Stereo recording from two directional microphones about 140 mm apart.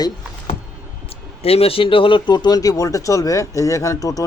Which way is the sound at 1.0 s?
45° left (ahead or behind).